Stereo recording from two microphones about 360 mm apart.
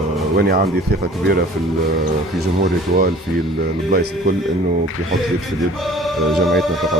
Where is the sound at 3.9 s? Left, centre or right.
Right.